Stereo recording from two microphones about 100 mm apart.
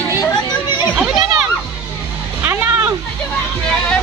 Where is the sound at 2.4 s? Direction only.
25° right (ahead or behind).